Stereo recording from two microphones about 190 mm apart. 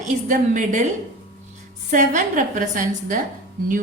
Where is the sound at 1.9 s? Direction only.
40° right (ahead or behind).